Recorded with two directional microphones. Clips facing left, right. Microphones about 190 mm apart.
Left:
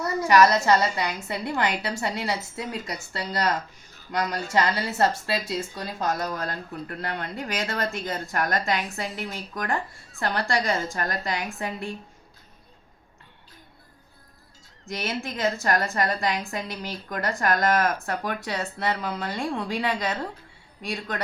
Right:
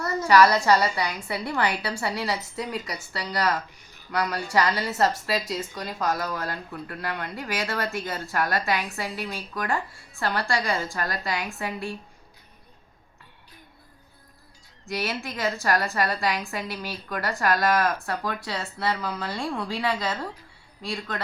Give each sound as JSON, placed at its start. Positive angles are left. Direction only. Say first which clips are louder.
{"t": 0.0, "sound": "a woman's voice", "louder": "even", "side_deg": 15}
{"t": 14.8, "sound": "a woman's voice", "louder": "even", "side_deg": 20}